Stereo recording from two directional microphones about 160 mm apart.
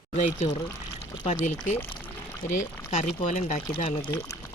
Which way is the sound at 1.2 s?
50° left (ahead or behind).